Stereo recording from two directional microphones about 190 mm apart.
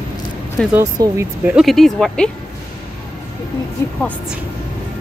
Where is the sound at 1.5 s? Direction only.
Centre (ahead or behind).